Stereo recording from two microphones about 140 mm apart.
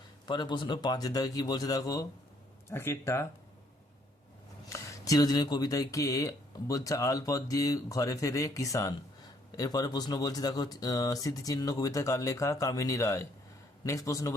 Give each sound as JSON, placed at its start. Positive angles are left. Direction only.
{"t": 0.3, "sound": "speech", "side_deg": 35}
{"t": 4.7, "sound": "speech", "side_deg": 25}